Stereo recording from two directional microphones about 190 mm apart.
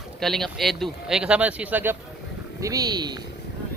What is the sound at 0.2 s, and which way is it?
Speech, centre (ahead or behind).